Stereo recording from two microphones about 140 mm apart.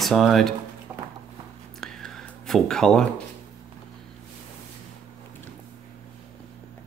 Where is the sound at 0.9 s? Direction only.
20° right (ahead or behind).